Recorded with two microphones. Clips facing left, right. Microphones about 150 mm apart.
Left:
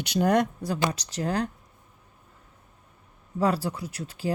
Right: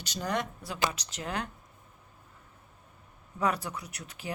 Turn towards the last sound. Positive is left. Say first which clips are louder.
# left 10 dB
turn(degrees=30)  # may be behind; listen again after turning